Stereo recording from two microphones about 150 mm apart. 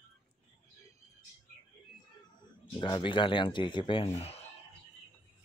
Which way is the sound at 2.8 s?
35° left (ahead or behind).